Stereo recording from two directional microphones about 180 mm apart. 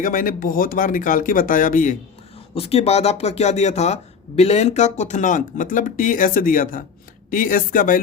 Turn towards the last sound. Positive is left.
turn(degrees=50)  # may be behind; listen again after turning